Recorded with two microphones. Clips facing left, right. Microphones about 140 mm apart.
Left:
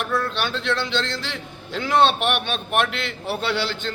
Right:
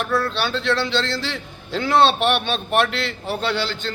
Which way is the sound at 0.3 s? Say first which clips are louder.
Right 3 dB; 10° left (ahead or behind).